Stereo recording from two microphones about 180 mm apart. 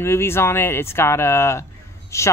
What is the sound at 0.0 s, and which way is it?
Speech, 15° left (ahead or behind).